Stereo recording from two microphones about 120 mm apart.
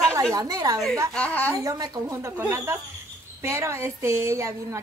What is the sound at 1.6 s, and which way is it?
Speech, 30° right (ahead or behind).